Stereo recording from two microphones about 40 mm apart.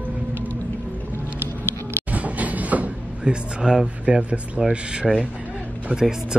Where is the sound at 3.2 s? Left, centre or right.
Centre.